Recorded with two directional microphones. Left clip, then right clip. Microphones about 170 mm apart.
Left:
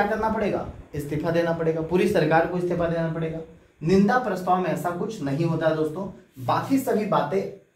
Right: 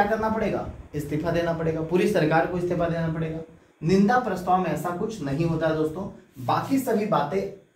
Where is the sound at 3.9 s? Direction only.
25° left (ahead or behind).